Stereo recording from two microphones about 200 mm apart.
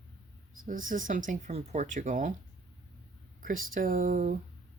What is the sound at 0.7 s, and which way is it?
Speech, 40° right (ahead or behind).